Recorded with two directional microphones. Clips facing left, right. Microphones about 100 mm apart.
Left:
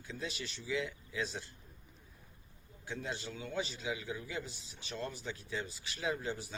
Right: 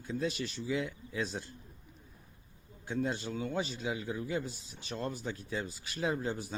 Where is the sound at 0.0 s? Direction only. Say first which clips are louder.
Right 8 dB; 45° right (ahead or behind).